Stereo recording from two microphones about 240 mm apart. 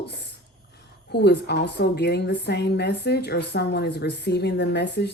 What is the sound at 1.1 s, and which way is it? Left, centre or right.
A woman's voice, left.